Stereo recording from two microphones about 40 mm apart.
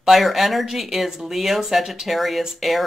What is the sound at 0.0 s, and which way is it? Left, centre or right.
Speech, centre.